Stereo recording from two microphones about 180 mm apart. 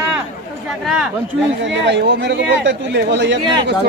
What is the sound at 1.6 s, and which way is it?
Speech, 75° right (ahead or behind).